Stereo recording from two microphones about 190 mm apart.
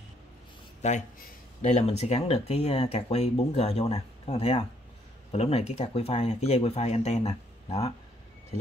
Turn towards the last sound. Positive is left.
turn(degrees=35)  # may be behind; listen again after turning